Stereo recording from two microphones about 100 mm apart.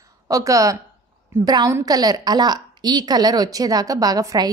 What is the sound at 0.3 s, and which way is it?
A woman's voice, 35° right (ahead or behind).